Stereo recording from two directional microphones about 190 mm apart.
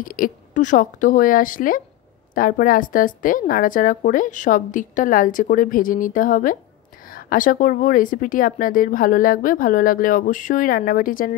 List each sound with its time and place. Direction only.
0.0 s a woman's voice: 45° left (ahead or behind)